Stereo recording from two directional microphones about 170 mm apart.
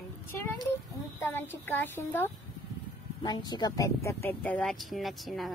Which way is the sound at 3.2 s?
25° left (ahead or behind).